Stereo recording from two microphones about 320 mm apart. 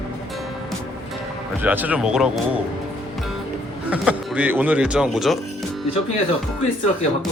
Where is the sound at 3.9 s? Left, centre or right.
Centre.